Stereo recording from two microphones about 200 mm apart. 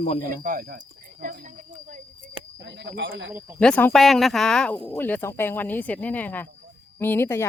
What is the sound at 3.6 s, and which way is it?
Speech, 5° left (ahead or behind).